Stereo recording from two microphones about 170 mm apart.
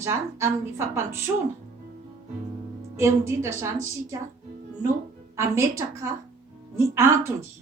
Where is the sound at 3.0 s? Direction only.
15° right (ahead or behind).